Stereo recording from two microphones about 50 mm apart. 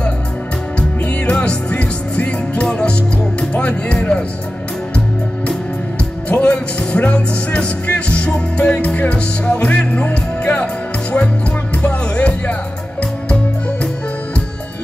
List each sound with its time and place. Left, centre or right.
0.7 s music: left
6.2 s speech: left
11.7 s music: left